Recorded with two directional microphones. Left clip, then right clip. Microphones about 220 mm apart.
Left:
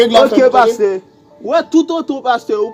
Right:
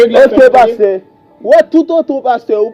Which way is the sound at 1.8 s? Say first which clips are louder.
Right 7 dB; 35° left (ahead or behind).